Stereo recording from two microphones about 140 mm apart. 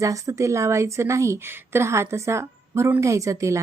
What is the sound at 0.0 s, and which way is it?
A woman's voice, 20° right (ahead or behind).